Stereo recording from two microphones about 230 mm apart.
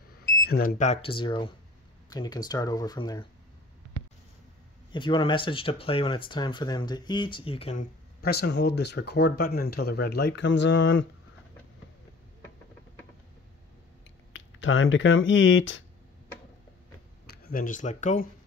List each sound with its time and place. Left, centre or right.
0.5 s speech: left; by 3.3 s centre
4.9 s speech: left
8.2 s speech: left
14.3 s speech: left
17.3 s speech: left